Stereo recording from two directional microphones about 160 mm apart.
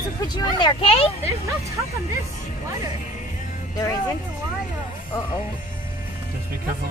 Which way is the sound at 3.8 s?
20° left (ahead or behind).